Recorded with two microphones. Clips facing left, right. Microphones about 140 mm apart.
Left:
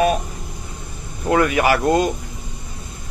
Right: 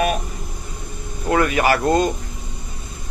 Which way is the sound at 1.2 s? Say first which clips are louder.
Left 1 dB; 15° left (ahead or behind).